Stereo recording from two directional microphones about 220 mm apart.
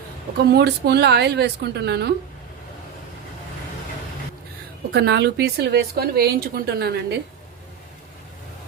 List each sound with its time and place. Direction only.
0.5 s a woman's voice: 50° right (ahead or behind)
4.9 s a woman's voice: 50° right (ahead or behind)